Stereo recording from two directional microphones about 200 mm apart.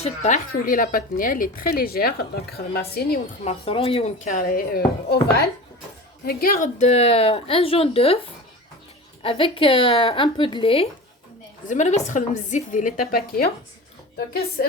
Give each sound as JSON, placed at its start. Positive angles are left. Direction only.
{"t": 0.0, "sound": "speech", "side_deg": 35}
{"t": 3.4, "sound": "a woman's voice", "side_deg": 30}
{"t": 9.2, "sound": "a woman's voice", "side_deg": 25}